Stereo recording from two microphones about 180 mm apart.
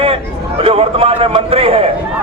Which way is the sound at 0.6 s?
30° right (ahead or behind).